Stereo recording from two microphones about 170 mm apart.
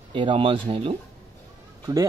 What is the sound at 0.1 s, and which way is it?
Speech, 30° right (ahead or behind).